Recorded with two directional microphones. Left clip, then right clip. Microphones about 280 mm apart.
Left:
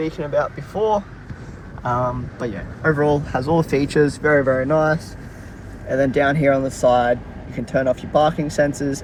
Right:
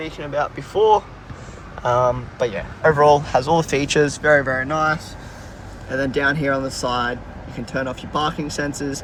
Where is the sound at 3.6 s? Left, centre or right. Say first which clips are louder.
Even; right.